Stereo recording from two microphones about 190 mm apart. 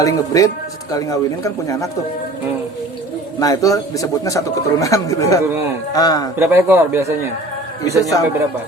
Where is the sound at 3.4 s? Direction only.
20° left (ahead or behind).